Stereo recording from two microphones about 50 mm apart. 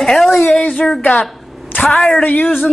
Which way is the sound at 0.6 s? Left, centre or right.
Left.